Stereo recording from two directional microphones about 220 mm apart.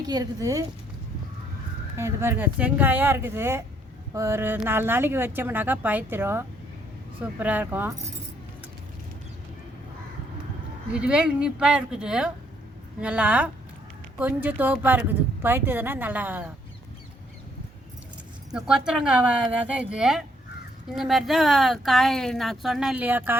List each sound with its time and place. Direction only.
0.1 s speech: 15° right (ahead or behind)
2.0 s speech: 10° right (ahead or behind)
10.9 s speech: 5° right (ahead or behind)
18.5 s speech: 5° right (ahead or behind)